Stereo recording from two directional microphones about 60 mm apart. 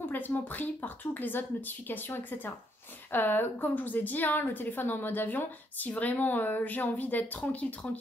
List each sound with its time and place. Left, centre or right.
0.1 s a woman's voice: left